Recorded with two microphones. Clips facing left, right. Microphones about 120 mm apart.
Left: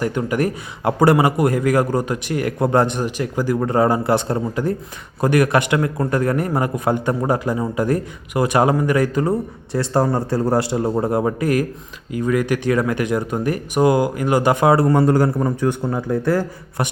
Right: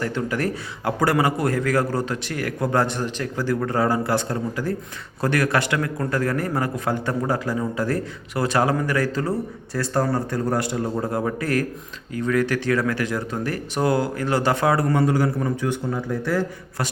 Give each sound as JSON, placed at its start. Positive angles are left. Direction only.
{"t": 0.0, "sound": "a man's voice", "side_deg": 15}
{"t": 14.9, "sound": "a man's voice", "side_deg": 45}